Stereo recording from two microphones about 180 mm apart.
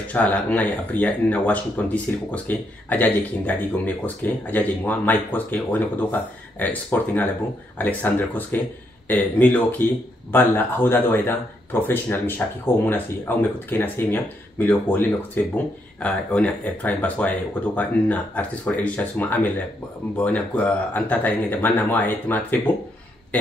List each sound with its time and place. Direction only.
0.1 s speech: 10° left (ahead or behind)